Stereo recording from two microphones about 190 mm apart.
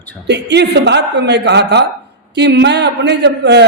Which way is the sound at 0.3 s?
65° right (ahead or behind).